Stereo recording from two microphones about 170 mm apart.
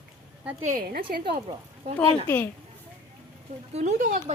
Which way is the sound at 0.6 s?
50° right (ahead or behind).